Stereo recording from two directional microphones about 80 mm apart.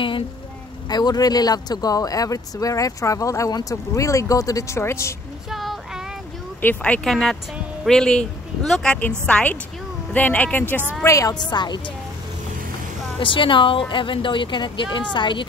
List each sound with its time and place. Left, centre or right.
0.8 s speech: left
5.5 s child singing: centre
6.6 s speech: left
7.1 s speech: centre; by 10.8 s left
11.1 s speech: left
11.3 s a woman's voice: left
13.2 s a woman's voice: left